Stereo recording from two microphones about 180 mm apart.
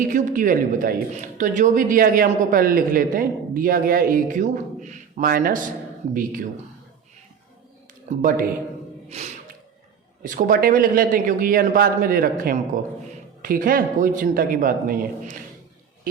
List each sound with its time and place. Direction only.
0.0 s speech: 45° right (ahead or behind)
8.1 s a man's voice: 40° right (ahead or behind)
9.0 s gasp: 40° right (ahead or behind)
10.2 s speech: 50° right (ahead or behind)